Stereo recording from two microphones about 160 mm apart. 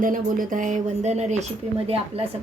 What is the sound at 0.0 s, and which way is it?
A woman's voice, 55° right (ahead or behind).